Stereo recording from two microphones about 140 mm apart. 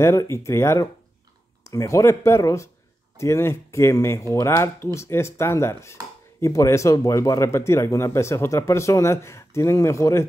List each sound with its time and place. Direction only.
0.0 s speech: 20° left (ahead or behind)